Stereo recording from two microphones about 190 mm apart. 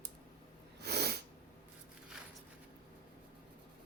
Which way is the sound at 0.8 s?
60° right (ahead or behind).